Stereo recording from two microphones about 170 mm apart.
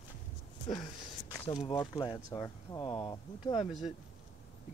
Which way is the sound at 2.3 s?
20° left (ahead or behind).